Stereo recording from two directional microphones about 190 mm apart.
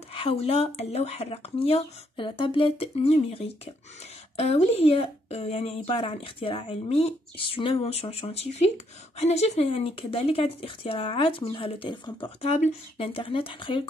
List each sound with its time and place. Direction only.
0.1 s a woman's voice: 30° left (ahead or behind)